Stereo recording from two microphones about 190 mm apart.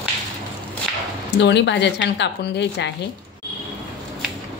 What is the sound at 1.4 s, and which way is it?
A woman's voice, 70° left (ahead or behind).